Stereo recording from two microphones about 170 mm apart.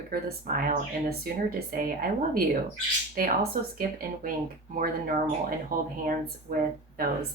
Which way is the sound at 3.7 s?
55° right (ahead or behind).